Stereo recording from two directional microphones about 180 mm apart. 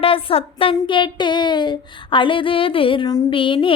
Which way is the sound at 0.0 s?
30° left (ahead or behind).